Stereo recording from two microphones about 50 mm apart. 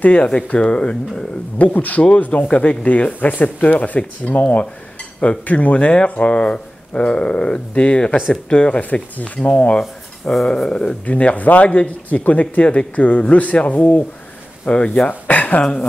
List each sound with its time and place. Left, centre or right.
0.0 s speech: left
1.6 s speech: left
10.4 s speech: centre
11.1 s speech: left
15.6 s speech: centre